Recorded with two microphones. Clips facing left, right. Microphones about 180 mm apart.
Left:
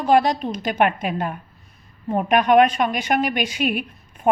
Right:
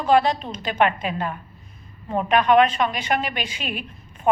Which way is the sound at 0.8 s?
50° left (ahead or behind).